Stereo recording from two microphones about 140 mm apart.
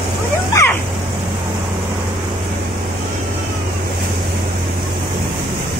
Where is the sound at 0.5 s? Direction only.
25° left (ahead or behind).